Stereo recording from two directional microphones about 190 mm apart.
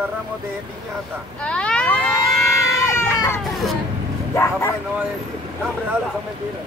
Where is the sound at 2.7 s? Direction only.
15° left (ahead or behind).